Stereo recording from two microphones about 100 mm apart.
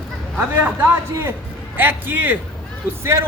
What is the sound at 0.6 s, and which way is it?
A man's voice, 20° right (ahead or behind).